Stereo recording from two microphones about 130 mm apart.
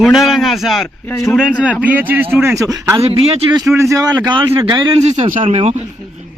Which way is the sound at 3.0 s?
50° right (ahead or behind).